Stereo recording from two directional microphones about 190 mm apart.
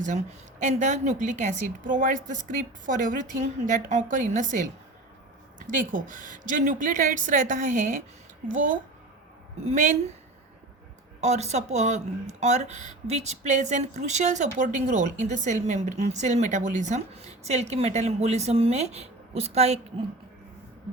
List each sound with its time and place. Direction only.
0.6 s a woman's voice: 40° right (ahead or behind)
11.2 s speech: 35° right (ahead or behind)